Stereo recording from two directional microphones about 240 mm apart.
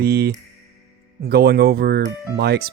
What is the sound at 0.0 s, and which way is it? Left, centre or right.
Speech, right.